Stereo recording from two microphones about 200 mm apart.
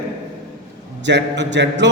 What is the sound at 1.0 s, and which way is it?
Speech, 60° right (ahead or behind).